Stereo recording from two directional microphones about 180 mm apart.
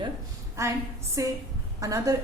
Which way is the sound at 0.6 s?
15° right (ahead or behind).